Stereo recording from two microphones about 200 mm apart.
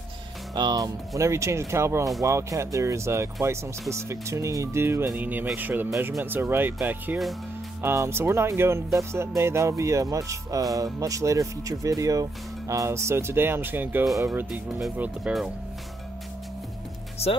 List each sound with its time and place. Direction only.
0.6 s speech: 20° right (ahead or behind); by 15.5 s 5° right (ahead or behind)